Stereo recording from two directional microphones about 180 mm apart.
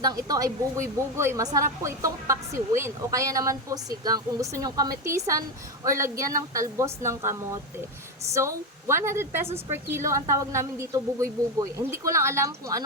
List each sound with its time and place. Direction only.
0.0 s a woman's voice: 20° right (ahead or behind)